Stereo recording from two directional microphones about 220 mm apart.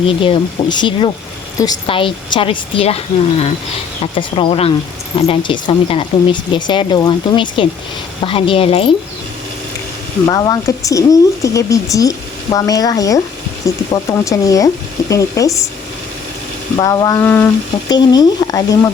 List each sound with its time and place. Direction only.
0.2 s speech: 20° left (ahead or behind)
10.2 s speech: 15° left (ahead or behind)
16.7 s speech: 15° left (ahead or behind)